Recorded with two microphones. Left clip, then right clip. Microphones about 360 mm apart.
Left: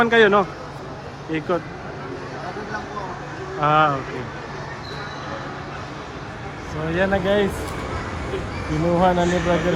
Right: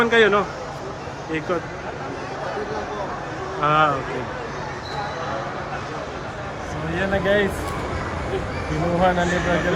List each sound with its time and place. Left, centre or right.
0.0 s a man's voice: centre
3.6 s speech: centre
6.9 s speech: centre